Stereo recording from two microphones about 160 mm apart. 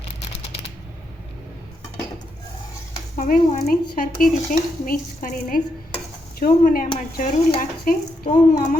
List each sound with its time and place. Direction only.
3.2 s speech: 60° left (ahead or behind)